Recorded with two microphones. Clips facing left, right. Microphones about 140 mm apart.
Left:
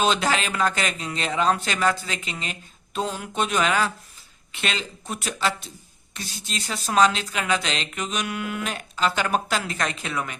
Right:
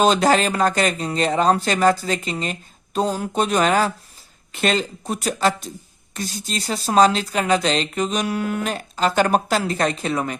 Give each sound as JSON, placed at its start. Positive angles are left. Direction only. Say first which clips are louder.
{"t": 0.0, "sound": "speech", "louder": "right 6 dB", "side_deg": -40}